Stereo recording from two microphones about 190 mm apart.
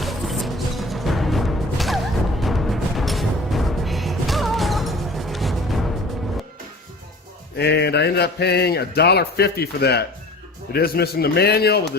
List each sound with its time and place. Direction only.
0.0 s music: centre (ahead or behind)
7.5 s speech: 60° left (ahead or behind)